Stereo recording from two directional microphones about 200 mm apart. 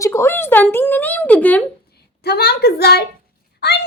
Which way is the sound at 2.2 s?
55° left (ahead or behind).